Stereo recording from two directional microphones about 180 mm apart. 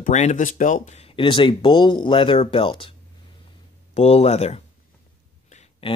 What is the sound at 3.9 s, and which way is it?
Speech, 35° left (ahead or behind).